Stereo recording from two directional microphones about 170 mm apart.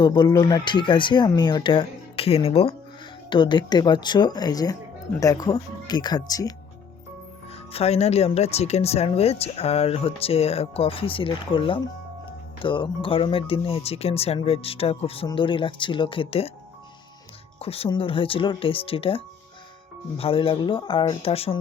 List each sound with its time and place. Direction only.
0.0 s speech: 25° left (ahead or behind)
7.7 s speech: 35° left (ahead or behind)
17.6 s speech: 35° left (ahead or behind)